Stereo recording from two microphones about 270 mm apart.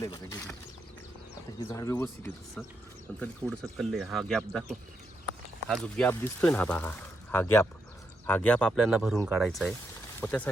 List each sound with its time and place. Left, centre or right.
0.0 s speech: centre
1.5 s speech: centre